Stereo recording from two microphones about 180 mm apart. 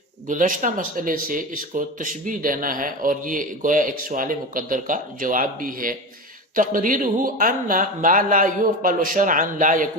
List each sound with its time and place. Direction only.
0.3 s speech: 45° right (ahead or behind)